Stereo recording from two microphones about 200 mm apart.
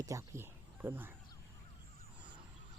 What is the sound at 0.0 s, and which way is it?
Speech, 15° right (ahead or behind).